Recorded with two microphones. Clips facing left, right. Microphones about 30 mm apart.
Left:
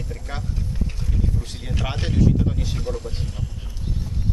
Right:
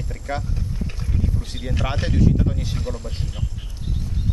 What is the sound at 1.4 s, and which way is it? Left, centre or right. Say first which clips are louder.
Speech: right 2 dB; centre.